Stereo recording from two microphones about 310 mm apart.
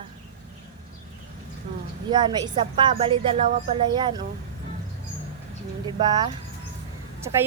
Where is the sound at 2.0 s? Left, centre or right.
Centre.